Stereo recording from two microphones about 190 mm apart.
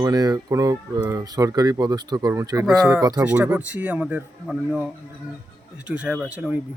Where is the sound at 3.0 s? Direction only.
20° right (ahead or behind).